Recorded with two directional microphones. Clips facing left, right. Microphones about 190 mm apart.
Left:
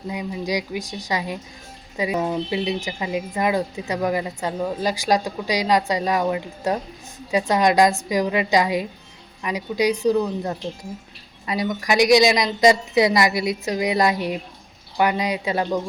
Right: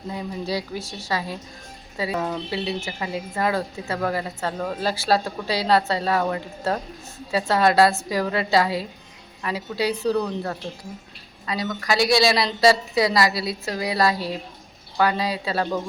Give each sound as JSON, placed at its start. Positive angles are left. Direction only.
{"t": 0.1, "sound": "a woman's voice", "side_deg": 15}